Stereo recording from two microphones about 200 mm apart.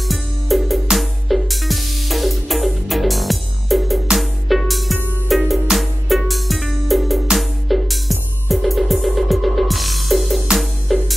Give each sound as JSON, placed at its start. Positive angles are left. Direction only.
{"t": 0.1, "sound": "music", "side_deg": 0}